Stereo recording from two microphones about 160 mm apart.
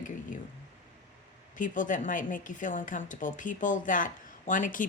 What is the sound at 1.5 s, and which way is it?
A woman's voice, 55° left (ahead or behind).